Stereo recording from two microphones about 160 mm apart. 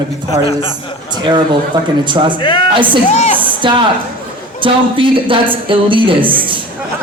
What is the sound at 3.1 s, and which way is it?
Speech, 45° left (ahead or behind).